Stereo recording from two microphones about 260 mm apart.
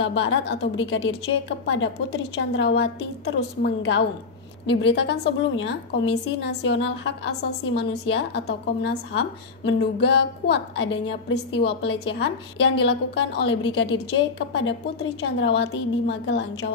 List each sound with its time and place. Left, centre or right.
0.0 s a woman's voice: left